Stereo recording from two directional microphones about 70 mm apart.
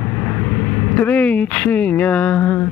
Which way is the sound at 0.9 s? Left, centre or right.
Left.